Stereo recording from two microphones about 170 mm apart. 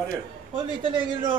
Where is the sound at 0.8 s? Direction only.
30° right (ahead or behind).